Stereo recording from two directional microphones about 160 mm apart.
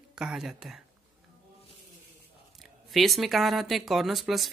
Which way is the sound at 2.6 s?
Centre (ahead or behind).